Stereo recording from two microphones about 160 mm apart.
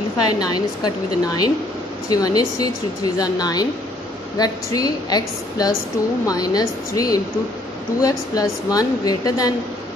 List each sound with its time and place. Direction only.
0.2 s a woman's voice: 25° left (ahead or behind)